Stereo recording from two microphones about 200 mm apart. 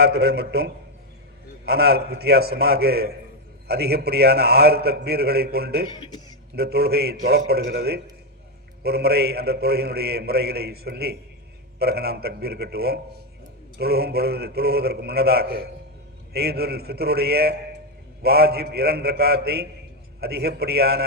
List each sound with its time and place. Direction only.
0.0 s a man's voice: 55° right (ahead or behind)